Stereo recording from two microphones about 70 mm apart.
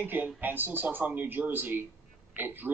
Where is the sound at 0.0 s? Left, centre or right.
Right.